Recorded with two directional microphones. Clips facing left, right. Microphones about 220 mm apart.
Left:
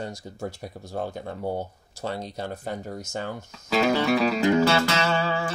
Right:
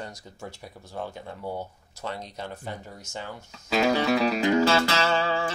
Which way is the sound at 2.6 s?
45° left (ahead or behind).